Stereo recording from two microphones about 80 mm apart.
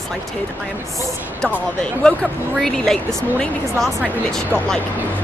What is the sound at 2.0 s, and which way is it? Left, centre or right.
Speech, centre.